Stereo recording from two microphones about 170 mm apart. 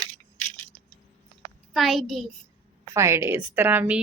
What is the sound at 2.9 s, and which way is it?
A woman's voice, 15° right (ahead or behind).